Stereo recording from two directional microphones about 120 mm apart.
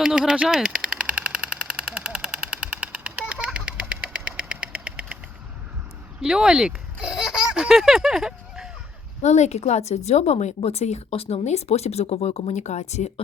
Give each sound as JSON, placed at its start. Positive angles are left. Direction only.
{"t": 0.0, "sound": "a sound", "side_deg": -5}
{"t": 6.2, "sound": "speech", "side_deg": -5}
{"t": 9.2, "sound": "a woman's voice", "side_deg": 75}